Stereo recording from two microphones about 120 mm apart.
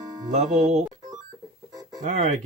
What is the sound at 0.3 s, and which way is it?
Speech, 75° right (ahead or behind).